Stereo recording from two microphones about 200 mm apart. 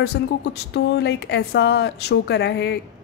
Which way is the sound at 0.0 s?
55° left (ahead or behind).